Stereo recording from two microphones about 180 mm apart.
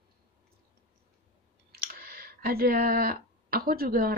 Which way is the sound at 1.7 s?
60° right (ahead or behind).